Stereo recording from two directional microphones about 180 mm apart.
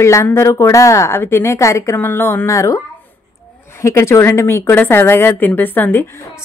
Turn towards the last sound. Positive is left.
turn(degrees=10)  # may be behind; listen again after turning